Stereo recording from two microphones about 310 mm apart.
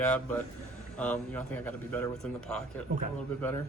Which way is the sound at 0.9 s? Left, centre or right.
Centre.